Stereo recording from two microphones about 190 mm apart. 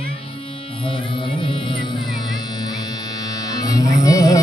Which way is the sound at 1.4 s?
25° left (ahead or behind).